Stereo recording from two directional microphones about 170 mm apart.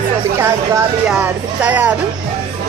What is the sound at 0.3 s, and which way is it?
Speech, 15° right (ahead or behind).